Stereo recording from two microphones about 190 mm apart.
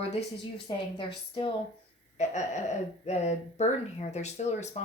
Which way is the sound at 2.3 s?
40° left (ahead or behind).